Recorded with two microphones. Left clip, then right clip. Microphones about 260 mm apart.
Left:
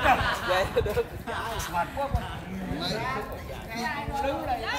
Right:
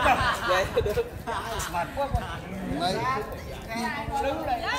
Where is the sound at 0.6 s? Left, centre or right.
Centre.